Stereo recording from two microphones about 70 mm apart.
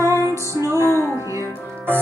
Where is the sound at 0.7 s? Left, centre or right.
Left.